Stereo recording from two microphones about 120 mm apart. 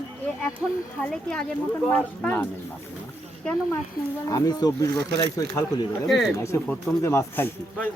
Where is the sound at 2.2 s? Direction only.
20° left (ahead or behind).